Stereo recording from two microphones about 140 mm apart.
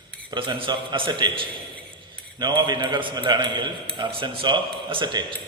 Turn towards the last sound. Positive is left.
turn(degrees=-35)  # may be behind; listen again after turning